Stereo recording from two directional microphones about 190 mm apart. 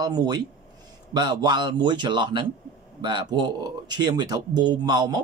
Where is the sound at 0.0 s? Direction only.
20° right (ahead or behind).